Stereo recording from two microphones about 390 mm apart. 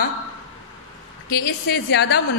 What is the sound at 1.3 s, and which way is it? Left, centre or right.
Speech, left.